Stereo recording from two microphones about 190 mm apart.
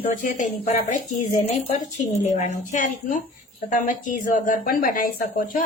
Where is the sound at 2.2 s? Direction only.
40° left (ahead or behind).